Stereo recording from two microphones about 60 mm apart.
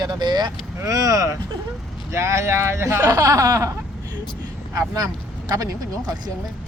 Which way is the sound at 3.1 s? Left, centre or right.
Right.